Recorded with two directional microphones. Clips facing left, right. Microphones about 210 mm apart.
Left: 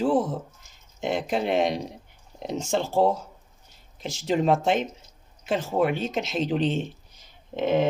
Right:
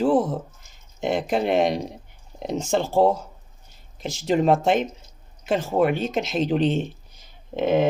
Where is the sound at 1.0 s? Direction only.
50° right (ahead or behind).